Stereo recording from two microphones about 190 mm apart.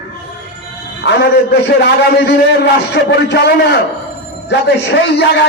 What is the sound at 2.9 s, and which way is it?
A man's voice, 65° left (ahead or behind).